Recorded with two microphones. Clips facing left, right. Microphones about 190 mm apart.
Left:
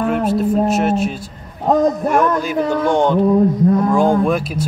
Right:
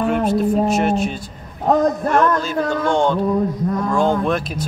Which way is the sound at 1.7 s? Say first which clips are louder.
Left 2 dB; 10° left (ahead or behind).